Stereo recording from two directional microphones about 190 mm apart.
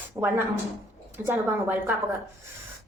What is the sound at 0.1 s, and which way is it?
A woman's voice, 15° right (ahead or behind).